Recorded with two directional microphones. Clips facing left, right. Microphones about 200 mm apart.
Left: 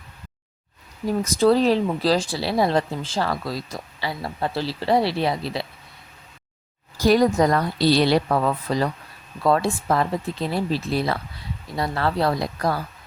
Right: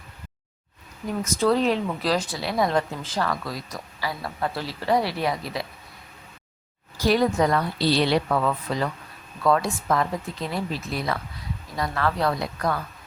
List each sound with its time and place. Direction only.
1.0 s speech: 35° left (ahead or behind)
6.9 s a woman's voice: 45° left (ahead or behind)